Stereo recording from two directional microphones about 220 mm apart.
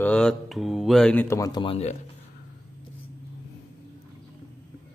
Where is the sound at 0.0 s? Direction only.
5° left (ahead or behind); by 2.0 s 25° left (ahead or behind).